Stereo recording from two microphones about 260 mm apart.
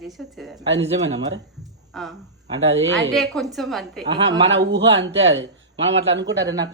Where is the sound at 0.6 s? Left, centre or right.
Right.